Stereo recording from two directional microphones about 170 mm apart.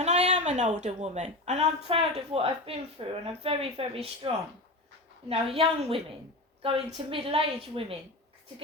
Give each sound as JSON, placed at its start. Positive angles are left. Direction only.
{"t": 0.0, "sound": "a woman's voice", "side_deg": -40}
{"t": 5.3, "sound": "a woman's voice", "side_deg": -35}